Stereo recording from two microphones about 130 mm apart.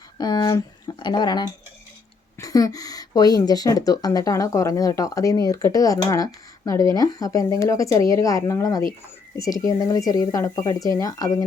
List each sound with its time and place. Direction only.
0.2 s speech: 30° left (ahead or behind)